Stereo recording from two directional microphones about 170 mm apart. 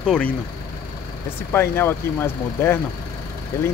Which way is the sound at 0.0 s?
5° left (ahead or behind).